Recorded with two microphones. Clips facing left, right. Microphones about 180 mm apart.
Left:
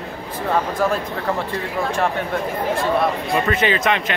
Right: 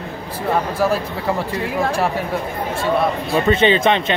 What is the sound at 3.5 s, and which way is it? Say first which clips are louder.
Speech: right 6 dB; 25° right (ahead or behind).